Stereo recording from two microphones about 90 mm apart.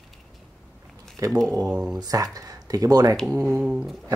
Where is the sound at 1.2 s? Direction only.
40° right (ahead or behind).